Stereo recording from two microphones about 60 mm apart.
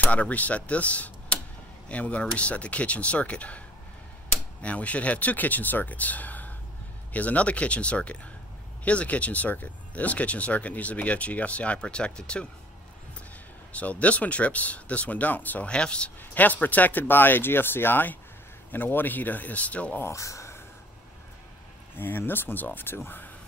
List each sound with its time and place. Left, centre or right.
0.0 s speech: left
13.7 s speech: left
16.2 s speech: left
20.1 s a sound: left
21.9 s speech: left